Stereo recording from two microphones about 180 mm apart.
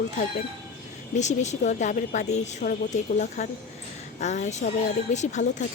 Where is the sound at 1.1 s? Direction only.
40° left (ahead or behind).